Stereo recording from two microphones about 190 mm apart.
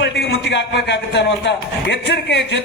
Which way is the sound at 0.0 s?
65° left (ahead or behind).